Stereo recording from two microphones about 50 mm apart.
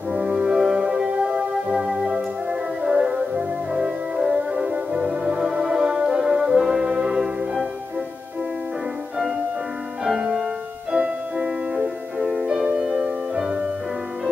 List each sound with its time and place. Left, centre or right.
0.1 s brass instrument: centre
1.8 s organ: centre
2.8 s music: centre
10.0 s music: centre